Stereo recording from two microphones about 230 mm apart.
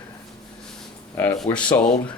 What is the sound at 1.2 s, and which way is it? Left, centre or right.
Speech, centre.